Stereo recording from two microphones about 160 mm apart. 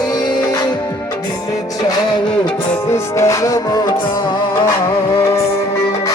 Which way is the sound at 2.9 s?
20° left (ahead or behind).